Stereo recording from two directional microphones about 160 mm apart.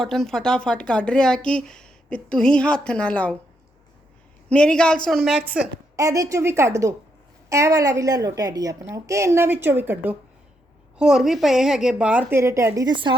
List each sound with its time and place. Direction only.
0.0 s speech: centre (ahead or behind)
4.4 s speech: 5° left (ahead or behind)
6.0 s a woman's voice: 20° right (ahead or behind)